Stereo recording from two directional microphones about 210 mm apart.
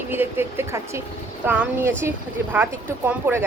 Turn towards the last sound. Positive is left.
turn(degrees=-10)  # may be behind; listen again after turning